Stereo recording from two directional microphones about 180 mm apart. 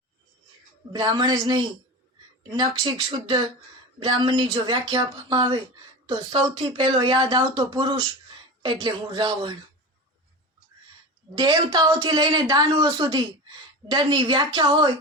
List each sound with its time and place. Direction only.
0.9 s speech: 25° right (ahead or behind)
11.3 s speech: 25° right (ahead or behind)